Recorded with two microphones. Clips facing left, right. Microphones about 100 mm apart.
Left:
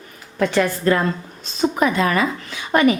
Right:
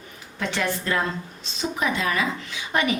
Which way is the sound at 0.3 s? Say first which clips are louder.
Left 8 dB; 45° left (ahead or behind).